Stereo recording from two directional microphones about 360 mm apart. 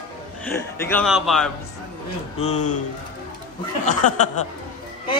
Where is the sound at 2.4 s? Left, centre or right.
Left.